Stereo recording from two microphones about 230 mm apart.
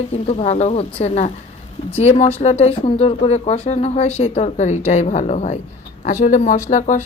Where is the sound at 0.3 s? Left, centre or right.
Left.